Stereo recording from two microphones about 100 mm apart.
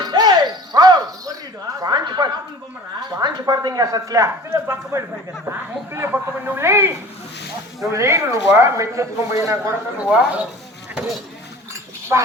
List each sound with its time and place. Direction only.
0.0 s music: 45° right (ahead or behind)
1.7 s a sound: 40° right (ahead or behind)
3.2 s speech: 45° right (ahead or behind)
10.0 s speech: 10° right (ahead or behind)
12.1 s speech: 25° right (ahead or behind)